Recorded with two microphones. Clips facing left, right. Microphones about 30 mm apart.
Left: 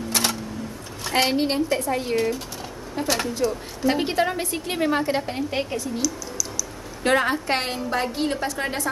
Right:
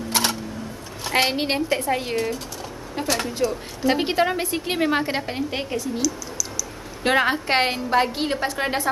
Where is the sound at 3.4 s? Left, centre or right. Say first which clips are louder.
Even; centre.